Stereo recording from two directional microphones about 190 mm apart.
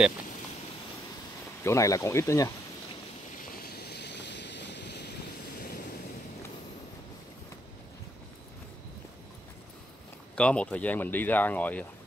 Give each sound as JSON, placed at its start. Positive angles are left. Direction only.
{"t": 1.6, "sound": "speech", "side_deg": 15}
{"t": 3.5, "sound": "vehicle", "side_deg": 55}
{"t": 5.6, "sound": "waves", "side_deg": 55}
{"t": 10.3, "sound": "speech", "side_deg": 5}